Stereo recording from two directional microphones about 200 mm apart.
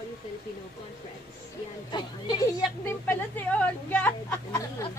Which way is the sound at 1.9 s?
20° left (ahead or behind).